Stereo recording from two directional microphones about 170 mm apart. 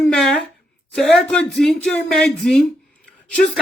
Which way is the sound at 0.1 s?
Centre (ahead or behind).